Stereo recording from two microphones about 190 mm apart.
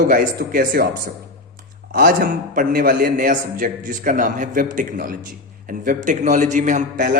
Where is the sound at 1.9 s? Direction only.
50° right (ahead or behind).